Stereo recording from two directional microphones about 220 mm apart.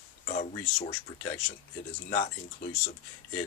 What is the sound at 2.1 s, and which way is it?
Speech, 35° left (ahead or behind).